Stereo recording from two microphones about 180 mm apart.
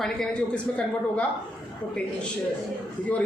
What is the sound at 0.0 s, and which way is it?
Speech, 5° left (ahead or behind).